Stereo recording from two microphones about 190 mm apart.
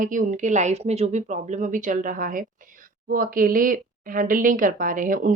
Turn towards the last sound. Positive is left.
turn(degrees=-45)  # may be behind; listen again after turning